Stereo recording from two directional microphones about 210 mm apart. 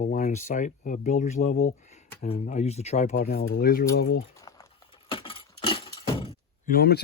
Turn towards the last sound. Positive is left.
turn(degrees=45)  # may be behind; listen again after turning